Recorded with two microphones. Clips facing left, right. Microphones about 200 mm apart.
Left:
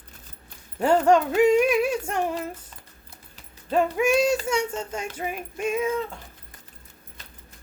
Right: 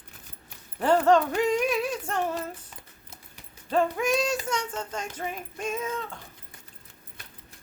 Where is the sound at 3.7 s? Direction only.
10° left (ahead or behind).